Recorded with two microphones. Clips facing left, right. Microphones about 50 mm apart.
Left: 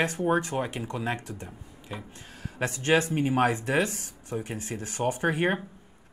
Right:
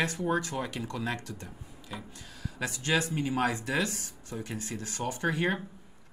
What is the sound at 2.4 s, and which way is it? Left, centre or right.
Speech, left.